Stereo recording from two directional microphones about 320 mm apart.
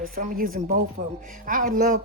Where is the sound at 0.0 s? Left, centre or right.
Right.